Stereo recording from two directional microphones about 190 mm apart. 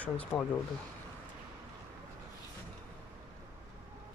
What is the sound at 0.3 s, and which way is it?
Speech, 5° left (ahead or behind).